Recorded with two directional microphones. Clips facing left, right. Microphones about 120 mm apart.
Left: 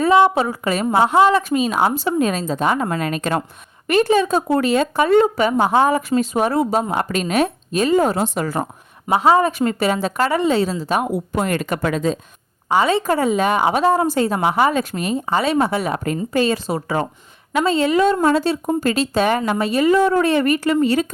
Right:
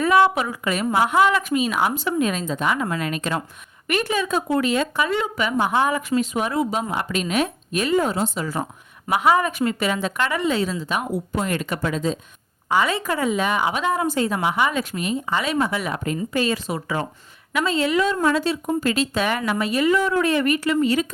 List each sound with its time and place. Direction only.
0.0 s a woman's voice: 30° left (ahead or behind); by 3.4 s 45° left (ahead or behind)
4.1 s a woman's voice: 30° left (ahead or behind)
8.1 s speech: 50° left (ahead or behind)
9.0 s a woman's voice: 30° left (ahead or behind)
11.0 s speech: 55° left (ahead or behind)
11.8 s speech: 60° left (ahead or behind)
12.6 s a woman's voice: 30° left (ahead or behind)